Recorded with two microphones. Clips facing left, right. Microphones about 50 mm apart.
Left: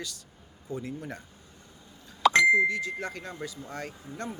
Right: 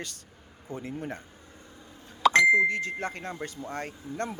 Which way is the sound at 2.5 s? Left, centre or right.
Right.